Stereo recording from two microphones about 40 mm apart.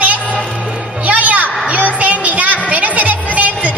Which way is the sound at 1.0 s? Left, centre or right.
Right.